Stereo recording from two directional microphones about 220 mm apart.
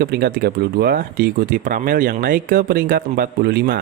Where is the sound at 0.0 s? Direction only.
45° right (ahead or behind).